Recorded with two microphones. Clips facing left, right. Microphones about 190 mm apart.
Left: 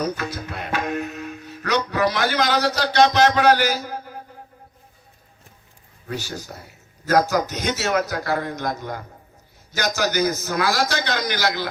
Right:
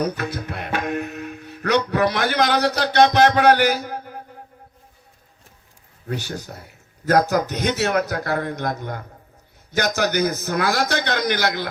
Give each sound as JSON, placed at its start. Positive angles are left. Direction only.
{"t": 0.0, "sound": "music", "side_deg": -60}
{"t": 1.9, "sound": "a man's voice", "side_deg": -55}
{"t": 6.1, "sound": "a man's voice", "side_deg": -60}